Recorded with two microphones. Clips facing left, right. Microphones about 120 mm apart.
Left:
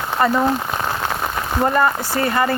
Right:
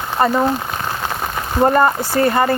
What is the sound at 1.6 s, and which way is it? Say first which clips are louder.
Speech: right 4 dB; 35° right (ahead or behind).